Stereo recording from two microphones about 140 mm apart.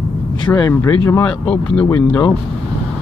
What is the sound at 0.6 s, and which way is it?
Speech, 25° left (ahead or behind).